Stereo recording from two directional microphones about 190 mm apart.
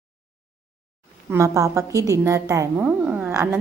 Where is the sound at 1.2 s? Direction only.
15° right (ahead or behind).